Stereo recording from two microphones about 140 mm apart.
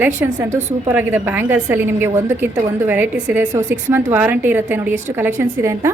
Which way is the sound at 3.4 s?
65° right (ahead or behind).